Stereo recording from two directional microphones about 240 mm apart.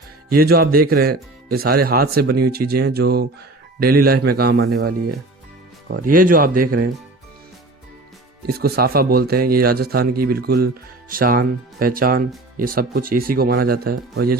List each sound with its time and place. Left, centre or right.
0.3 s speech: right
8.4 s speech: right